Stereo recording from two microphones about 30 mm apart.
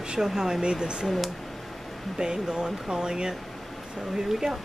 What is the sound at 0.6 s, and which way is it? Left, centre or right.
Speech, right.